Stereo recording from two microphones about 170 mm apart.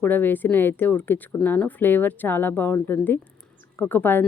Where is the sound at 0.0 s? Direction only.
10° left (ahead or behind).